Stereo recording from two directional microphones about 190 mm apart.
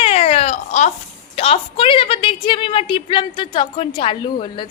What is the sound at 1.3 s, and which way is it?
A woman's voice, 30° left (ahead or behind).